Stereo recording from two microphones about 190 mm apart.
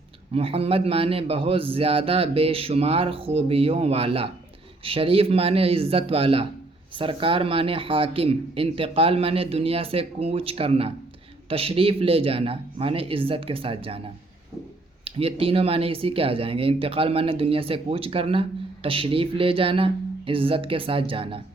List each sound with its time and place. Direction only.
0.3 s speech: 30° right (ahead or behind)